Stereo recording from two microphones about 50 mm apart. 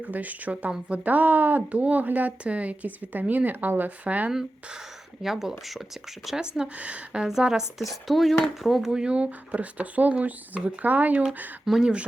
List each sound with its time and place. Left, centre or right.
0.0 s a woman's voice: right
1.1 s a woman's voice: right
4.3 s speech: centre
6.7 s speech: right
7.3 s speech: centre
7.8 s speech: centre; by 11.3 s right
11.6 s speech: centre